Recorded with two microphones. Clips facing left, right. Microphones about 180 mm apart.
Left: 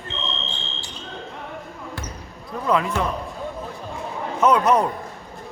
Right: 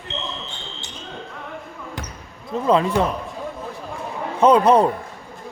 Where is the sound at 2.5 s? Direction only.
25° right (ahead or behind).